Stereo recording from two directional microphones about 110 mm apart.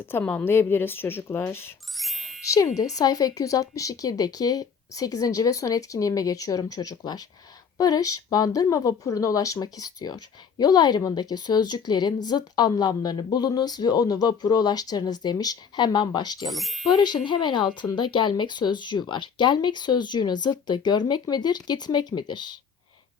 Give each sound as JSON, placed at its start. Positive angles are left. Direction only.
{"t": 0.0, "sound": "speech", "side_deg": 20}
{"t": 2.0, "sound": "music", "side_deg": 0}
{"t": 2.5, "sound": "speech", "side_deg": 30}
{"t": 16.5, "sound": "speech", "side_deg": 0}
{"t": 16.9, "sound": "speech", "side_deg": 40}